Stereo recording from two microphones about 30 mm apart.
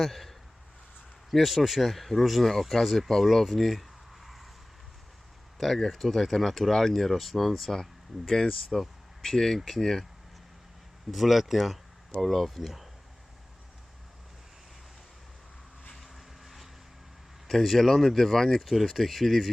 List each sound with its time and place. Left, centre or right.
0.0 s speech: centre
3.2 s a sound: centre
5.5 s speech: centre
11.1 s speech: centre
16.0 s vehicle: centre
17.5 s speech: centre
18.7 s speech: centre